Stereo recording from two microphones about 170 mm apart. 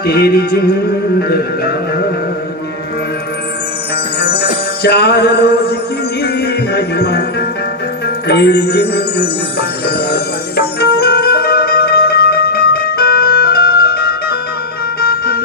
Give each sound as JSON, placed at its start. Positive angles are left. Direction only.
{"t": 0.0, "sound": "music", "side_deg": 65}
{"t": 4.2, "sound": "music", "side_deg": 65}
{"t": 8.3, "sound": "music", "side_deg": 75}